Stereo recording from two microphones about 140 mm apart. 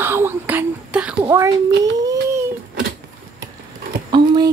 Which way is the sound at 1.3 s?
25° right (ahead or behind).